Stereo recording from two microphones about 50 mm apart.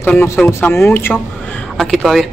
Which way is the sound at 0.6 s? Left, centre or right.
Left.